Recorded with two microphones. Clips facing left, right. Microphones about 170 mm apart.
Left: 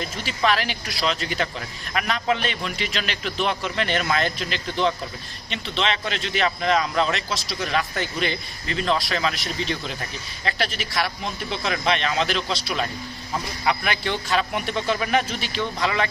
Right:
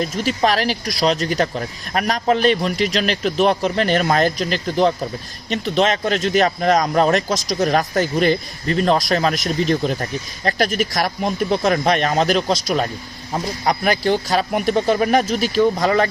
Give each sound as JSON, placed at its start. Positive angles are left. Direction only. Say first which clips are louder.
{"t": 0.0, "sound": "speech", "louder": "right 6 dB", "side_deg": -40}